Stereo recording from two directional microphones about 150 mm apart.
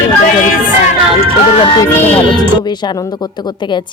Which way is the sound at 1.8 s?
15° left (ahead or behind).